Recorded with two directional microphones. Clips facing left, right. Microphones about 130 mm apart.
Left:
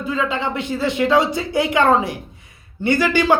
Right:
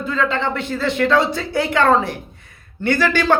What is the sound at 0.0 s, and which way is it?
Speech, 10° left (ahead or behind).